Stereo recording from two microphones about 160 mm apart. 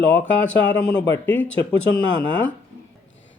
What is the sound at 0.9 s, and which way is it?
Speech, 10° left (ahead or behind).